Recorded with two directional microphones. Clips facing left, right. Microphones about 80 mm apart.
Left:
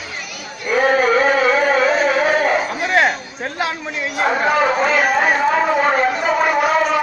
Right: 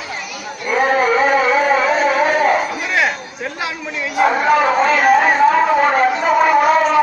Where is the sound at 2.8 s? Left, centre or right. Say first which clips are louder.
Left 2 dB; left.